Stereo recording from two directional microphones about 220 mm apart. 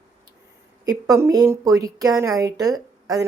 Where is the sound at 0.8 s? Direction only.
15° right (ahead or behind).